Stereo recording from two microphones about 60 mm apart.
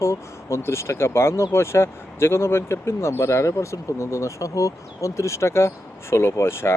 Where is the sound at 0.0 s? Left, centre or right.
Left.